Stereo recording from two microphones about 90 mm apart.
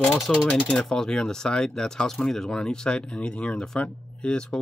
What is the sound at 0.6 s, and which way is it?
Speech, 10° left (ahead or behind).